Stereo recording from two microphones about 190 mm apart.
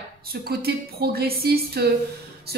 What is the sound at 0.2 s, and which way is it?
Speech, 55° right (ahead or behind).